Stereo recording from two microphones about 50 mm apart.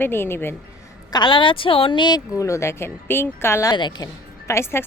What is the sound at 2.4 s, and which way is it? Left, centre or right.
A woman's voice, left.